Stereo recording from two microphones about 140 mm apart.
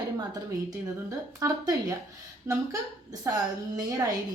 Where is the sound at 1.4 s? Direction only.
25° right (ahead or behind).